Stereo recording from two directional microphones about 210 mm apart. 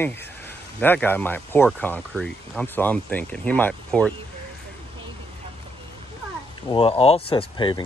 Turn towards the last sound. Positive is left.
turn(degrees=20)  # may be behind; listen again after turning